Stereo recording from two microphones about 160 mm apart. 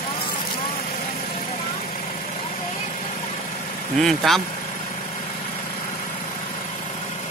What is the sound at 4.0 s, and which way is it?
Speech, centre (ahead or behind).